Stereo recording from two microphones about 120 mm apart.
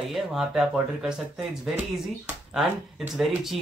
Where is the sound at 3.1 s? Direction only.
Centre (ahead or behind).